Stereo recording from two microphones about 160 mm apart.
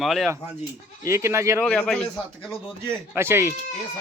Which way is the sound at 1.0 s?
15° right (ahead or behind).